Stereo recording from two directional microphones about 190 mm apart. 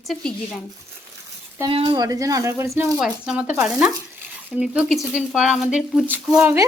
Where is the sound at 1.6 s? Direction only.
25° right (ahead or behind).